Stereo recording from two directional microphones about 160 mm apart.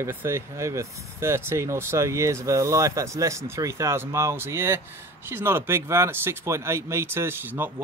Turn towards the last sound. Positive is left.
turn(degrees=-15)  # may be behind; listen again after turning